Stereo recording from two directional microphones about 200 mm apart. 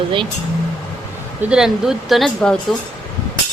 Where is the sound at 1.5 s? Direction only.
Centre (ahead or behind).